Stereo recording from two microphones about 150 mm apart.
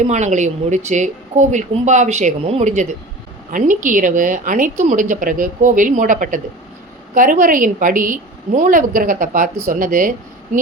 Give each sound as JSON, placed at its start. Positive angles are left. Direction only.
{"t": 0.0, "sound": "speech", "side_deg": -50}
{"t": 3.5, "sound": "a woman's voice", "side_deg": -60}